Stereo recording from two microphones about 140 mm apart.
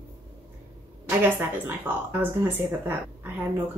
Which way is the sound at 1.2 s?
15° right (ahead or behind).